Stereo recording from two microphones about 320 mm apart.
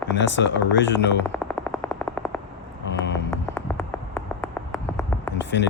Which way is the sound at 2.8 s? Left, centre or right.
Left.